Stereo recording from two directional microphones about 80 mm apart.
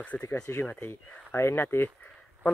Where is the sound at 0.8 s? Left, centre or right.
Left.